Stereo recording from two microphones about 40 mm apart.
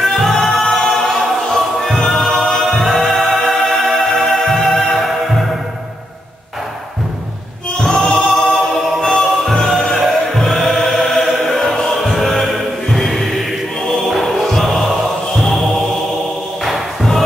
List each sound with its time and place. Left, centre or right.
0.0 s choir: centre
2.8 s music: centre
7.8 s music: centre
9.1 s music: centre
11.9 s chant: centre
15.3 s music: centre
16.6 s thump: centre